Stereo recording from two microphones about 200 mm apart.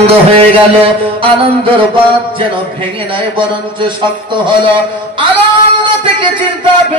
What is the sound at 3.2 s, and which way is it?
A man's voice, 25° right (ahead or behind).